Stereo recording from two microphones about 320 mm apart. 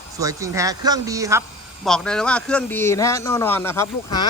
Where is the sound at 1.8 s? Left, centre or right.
Centre.